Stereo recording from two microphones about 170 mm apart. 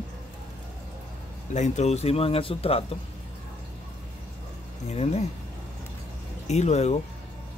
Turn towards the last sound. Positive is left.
turn(degrees=40)  # may be behind; listen again after turning